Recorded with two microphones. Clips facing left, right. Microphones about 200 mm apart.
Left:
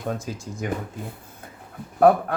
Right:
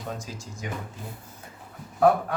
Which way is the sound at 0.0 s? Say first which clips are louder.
Left 6 dB; 55° left (ahead or behind).